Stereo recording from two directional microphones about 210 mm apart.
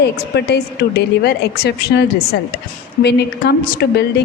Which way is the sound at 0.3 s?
50° left (ahead or behind).